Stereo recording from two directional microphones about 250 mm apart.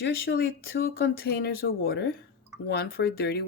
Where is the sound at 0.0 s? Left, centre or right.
Left.